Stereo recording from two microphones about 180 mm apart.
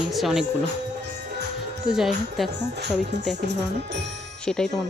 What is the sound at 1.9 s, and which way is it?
Speech, centre (ahead or behind).